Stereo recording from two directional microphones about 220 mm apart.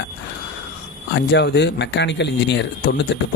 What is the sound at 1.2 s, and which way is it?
Speech, 50° left (ahead or behind).